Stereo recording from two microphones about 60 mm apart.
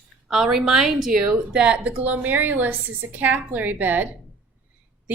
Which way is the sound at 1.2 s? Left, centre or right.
Centre.